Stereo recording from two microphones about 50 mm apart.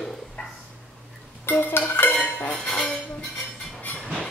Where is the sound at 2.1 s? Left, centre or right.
Left.